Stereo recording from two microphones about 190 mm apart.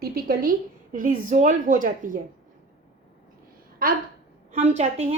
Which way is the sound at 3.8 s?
50° right (ahead or behind).